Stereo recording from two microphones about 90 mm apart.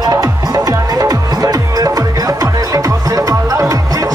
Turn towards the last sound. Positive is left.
turn(degrees=-40)  # may be behind; listen again after turning